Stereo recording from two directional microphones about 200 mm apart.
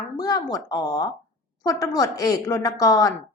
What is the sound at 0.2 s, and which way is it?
A woman's voice, 20° left (ahead or behind).